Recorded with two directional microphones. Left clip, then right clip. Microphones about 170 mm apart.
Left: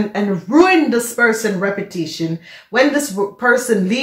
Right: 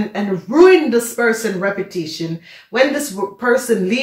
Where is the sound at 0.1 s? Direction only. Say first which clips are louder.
Left 3 dB; 50° left (ahead or behind).